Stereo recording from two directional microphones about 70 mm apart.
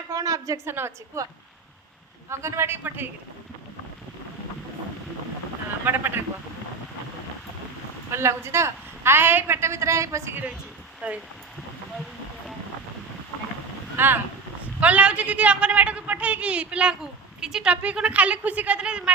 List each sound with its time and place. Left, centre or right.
0.1 s a woman's voice: right
0.7 s a woman's voice: right
2.3 s a woman's voice: right
5.8 s a woman's voice: right
8.1 s a woman's voice: right
11.0 s a woman's voice: right
13.9 s speech: right
14.8 s a woman's voice: centre